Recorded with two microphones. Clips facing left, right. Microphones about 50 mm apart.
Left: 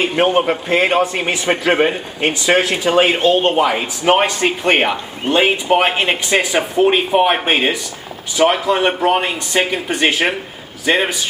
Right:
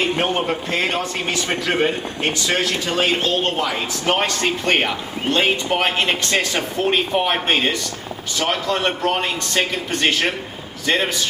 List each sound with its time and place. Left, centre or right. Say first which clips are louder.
0.0 s a man's voice: left 5 dB; centre